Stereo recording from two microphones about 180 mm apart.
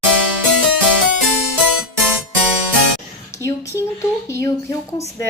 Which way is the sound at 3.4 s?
15° left (ahead or behind).